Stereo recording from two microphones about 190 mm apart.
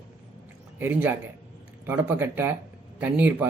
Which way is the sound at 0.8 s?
10° right (ahead or behind).